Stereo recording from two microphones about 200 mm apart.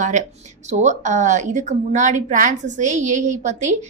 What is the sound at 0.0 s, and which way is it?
A woman's voice, 35° right (ahead or behind).